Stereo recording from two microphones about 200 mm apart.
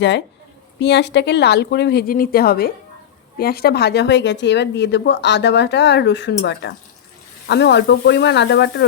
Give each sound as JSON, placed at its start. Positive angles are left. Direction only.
{"t": 0.8, "sound": "speech", "side_deg": 60}